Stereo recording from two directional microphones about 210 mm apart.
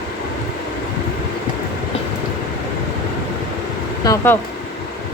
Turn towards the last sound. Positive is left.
turn(degrees=15)  # may be behind; listen again after turning